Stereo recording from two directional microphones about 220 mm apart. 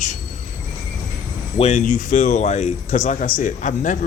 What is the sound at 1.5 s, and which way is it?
A man's voice, 30° left (ahead or behind).